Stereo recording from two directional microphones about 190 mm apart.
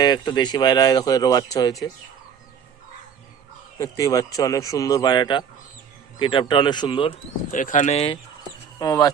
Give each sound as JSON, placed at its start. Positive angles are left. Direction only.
{"t": 0.0, "sound": "speech", "side_deg": 20}
{"t": 3.8, "sound": "speech", "side_deg": 20}
{"t": 7.5, "sound": "speech", "side_deg": 45}
{"t": 8.8, "sound": "speech", "side_deg": 20}